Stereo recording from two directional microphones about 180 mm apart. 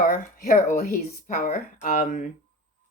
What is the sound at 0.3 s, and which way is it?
Speech, 50° left (ahead or behind).